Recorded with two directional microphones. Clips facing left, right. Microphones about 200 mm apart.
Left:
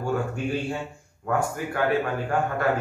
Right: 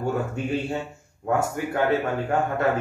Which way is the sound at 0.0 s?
20° right (ahead or behind).